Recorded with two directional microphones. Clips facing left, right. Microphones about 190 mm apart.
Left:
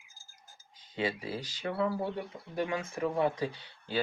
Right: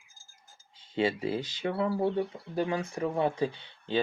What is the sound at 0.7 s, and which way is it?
Speech, 25° right (ahead or behind).